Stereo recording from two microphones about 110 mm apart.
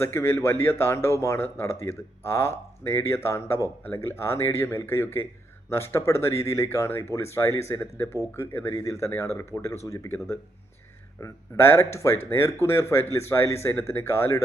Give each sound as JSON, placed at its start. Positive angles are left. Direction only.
{"t": 0.0, "sound": "speech", "side_deg": 20}